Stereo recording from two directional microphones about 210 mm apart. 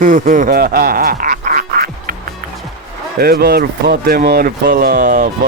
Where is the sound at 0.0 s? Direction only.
40° right (ahead or behind).